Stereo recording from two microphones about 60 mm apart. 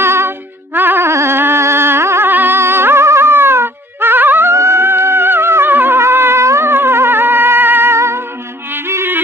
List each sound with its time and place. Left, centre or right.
0.0 s music: right
1.0 s a sound: right
2.3 s music: right
4.5 s music: right
7.9 s music: right